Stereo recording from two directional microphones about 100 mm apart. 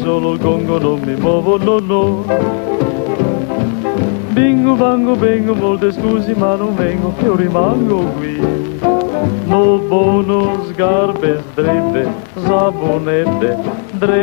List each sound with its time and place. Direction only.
1.6 s music: 25° right (ahead or behind)
4.4 s music: 25° right (ahead or behind)
9.5 s music: 25° right (ahead or behind)